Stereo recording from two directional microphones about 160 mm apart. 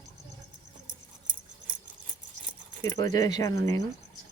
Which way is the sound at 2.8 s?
25° left (ahead or behind).